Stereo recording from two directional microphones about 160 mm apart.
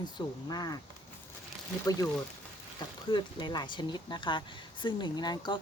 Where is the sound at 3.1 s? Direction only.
30° left (ahead or behind).